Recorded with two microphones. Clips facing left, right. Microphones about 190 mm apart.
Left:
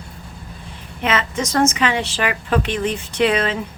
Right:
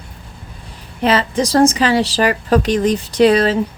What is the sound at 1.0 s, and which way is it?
A woman's voice, 35° right (ahead or behind).